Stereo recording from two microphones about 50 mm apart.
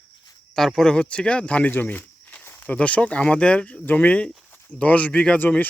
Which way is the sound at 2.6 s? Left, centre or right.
Left.